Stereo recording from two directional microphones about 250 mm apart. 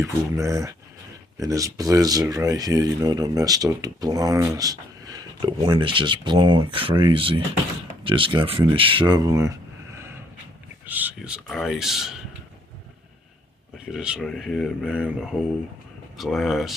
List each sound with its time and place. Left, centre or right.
0.0 s speech: centre
10.8 s speech: centre
13.9 s speech: centre